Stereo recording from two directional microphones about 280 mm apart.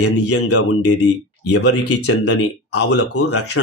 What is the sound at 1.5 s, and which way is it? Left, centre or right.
Speech, left.